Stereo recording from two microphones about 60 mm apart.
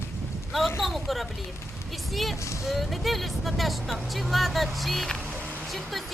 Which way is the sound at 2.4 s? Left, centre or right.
Left.